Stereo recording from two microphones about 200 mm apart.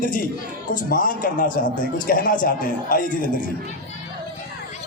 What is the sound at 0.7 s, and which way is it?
A man's voice, 45° left (ahead or behind).